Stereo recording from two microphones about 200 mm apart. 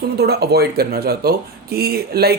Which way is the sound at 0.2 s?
50° right (ahead or behind).